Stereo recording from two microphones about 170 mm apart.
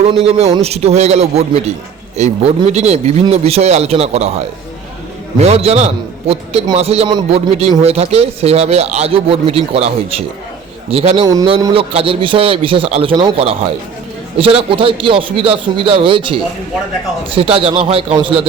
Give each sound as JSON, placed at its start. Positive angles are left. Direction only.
{"t": 0.0, "sound": "a man's voice", "side_deg": -35}